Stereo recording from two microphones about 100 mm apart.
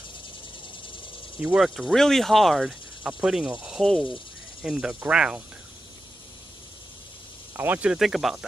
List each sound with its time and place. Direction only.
1.4 s speech: 10° right (ahead or behind)
1.8 s speech: centre (ahead or behind)
3.0 s cricket: 10° right (ahead or behind)
4.6 s speech: 5° right (ahead or behind)
7.5 s speech: 15° right (ahead or behind)
8.0 s speech: centre (ahead or behind)